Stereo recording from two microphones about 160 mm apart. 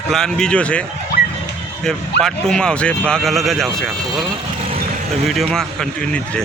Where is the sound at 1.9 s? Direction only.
5° left (ahead or behind).